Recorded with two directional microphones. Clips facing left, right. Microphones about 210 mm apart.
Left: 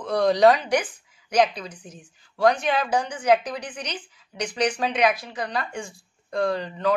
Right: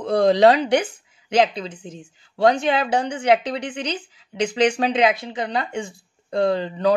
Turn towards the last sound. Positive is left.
turn(degrees=-25)  # may be behind; listen again after turning